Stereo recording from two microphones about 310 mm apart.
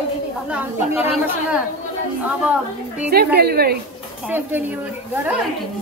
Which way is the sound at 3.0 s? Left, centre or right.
Right.